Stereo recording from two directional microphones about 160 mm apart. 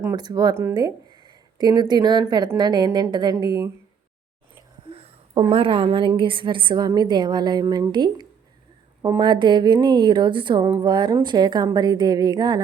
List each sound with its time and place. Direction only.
0.0 s a woman's voice: 20° right (ahead or behind)
0.5 s a woman's voice: 15° right (ahead or behind)
4.9 s a woman's voice: 35° right (ahead or behind)